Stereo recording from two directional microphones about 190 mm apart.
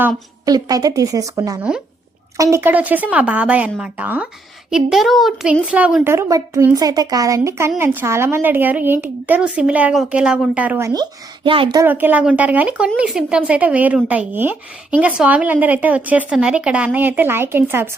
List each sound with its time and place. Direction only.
0.4 s a woman's voice: 20° right (ahead or behind)
11.8 s speech: 10° right (ahead or behind)